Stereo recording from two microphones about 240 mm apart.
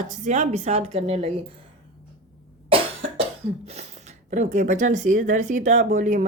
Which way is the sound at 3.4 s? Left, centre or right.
Right.